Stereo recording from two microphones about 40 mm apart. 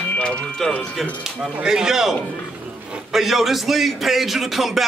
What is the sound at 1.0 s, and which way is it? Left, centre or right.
Speech, centre.